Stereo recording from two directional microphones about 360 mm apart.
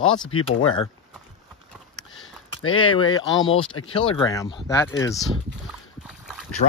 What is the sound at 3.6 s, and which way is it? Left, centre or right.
Speech, left.